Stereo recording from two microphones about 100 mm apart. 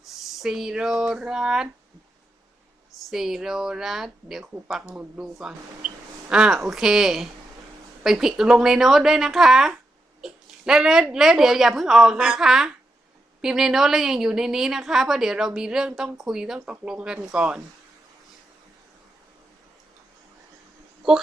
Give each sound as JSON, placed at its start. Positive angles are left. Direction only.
{"t": 0.0, "sound": "speech", "side_deg": -5}
{"t": 3.1, "sound": "a woman's voice", "side_deg": -5}
{"t": 10.2, "sound": "a sound", "side_deg": -5}
{"t": 11.1, "sound": "a woman's voice", "side_deg": -5}
{"t": 16.6, "sound": "speech", "side_deg": -20}
{"t": 16.8, "sound": "speech", "side_deg": -10}